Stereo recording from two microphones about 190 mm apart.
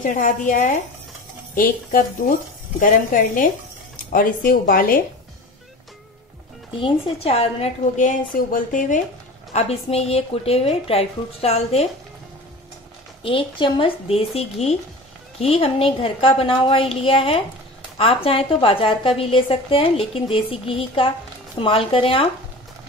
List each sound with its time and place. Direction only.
0.0 s speech: 45° left (ahead or behind)
6.8 s a woman's voice: 30° left (ahead or behind)
13.2 s a woman's voice: 25° left (ahead or behind)